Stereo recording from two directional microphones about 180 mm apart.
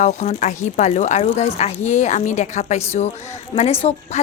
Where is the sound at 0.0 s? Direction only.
40° left (ahead or behind).